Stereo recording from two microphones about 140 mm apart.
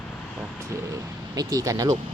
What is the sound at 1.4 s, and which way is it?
Speech, 25° right (ahead or behind).